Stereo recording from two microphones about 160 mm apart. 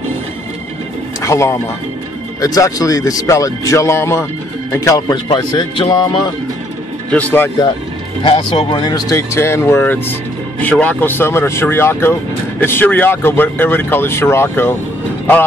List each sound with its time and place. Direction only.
1.2 s speech: 15° left (ahead or behind)
7.1 s speech: 10° left (ahead or behind)
8.2 s speech: 30° left (ahead or behind); by 14.8 s 15° left (ahead or behind)